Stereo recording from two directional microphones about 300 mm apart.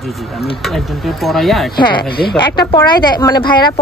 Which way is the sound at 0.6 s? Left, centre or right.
Centre.